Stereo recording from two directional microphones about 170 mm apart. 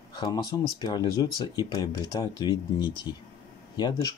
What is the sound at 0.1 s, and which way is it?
Speech, 25° left (ahead or behind).